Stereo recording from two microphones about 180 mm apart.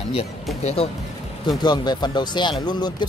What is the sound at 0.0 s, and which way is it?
Speech, 30° left (ahead or behind).